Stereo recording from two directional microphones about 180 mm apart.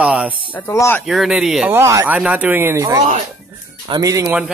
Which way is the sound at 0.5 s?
15° left (ahead or behind).